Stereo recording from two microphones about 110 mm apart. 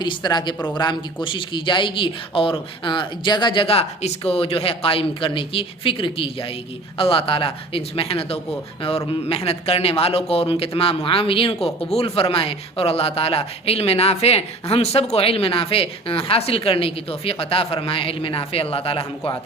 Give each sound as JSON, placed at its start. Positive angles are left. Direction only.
{"t": 0.0, "sound": "a man's voice", "side_deg": 40}